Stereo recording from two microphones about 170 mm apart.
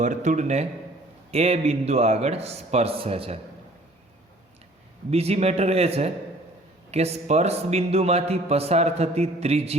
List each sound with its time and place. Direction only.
0.0 s a man's voice: 45° right (ahead or behind)
5.1 s a man's voice: 40° right (ahead or behind)